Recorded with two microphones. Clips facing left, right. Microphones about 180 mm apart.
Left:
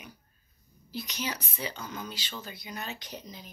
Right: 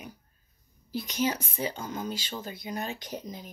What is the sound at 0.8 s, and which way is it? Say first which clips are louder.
Speech: right 7 dB; 50° right (ahead or behind).